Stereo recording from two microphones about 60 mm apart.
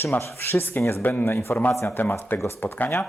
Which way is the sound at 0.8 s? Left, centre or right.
Left.